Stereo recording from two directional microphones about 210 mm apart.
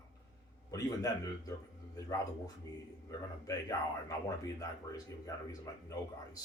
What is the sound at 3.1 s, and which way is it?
Speech, 15° left (ahead or behind).